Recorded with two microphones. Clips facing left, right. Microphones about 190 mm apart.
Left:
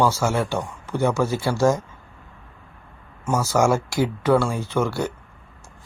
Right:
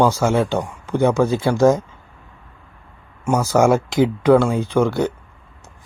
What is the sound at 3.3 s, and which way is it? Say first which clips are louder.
Speech: right 4 dB; 20° right (ahead or behind).